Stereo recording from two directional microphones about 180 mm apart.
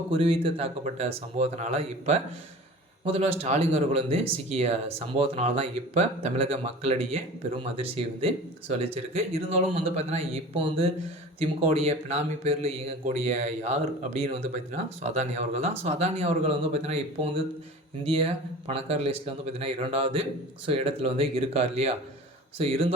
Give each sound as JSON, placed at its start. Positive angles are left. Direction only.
{"t": 0.1, "sound": "speech", "side_deg": -30}